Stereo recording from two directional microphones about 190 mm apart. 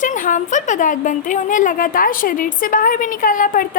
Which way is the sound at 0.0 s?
45° left (ahead or behind).